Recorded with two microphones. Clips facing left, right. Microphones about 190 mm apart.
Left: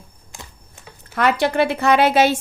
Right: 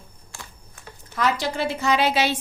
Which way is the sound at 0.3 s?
15° left (ahead or behind).